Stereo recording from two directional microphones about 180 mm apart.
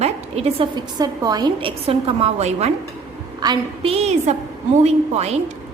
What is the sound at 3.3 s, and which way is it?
A woman's voice, 25° right (ahead or behind).